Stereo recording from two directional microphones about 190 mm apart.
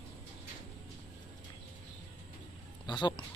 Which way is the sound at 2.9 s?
25° left (ahead or behind).